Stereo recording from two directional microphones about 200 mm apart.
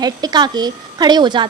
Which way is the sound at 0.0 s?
20° right (ahead or behind).